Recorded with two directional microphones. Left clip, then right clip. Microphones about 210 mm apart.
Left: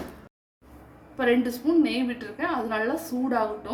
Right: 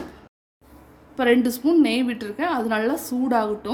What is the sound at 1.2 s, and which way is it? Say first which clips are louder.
A woman's voice: right 4 dB; 45° right (ahead or behind).